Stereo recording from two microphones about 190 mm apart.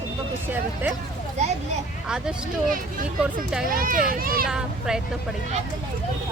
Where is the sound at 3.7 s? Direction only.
45° right (ahead or behind).